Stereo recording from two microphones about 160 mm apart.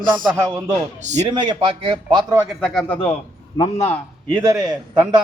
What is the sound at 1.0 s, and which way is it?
Speech, 45° right (ahead or behind).